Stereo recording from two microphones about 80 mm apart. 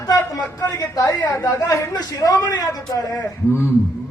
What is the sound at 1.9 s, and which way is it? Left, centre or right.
A man's voice, left.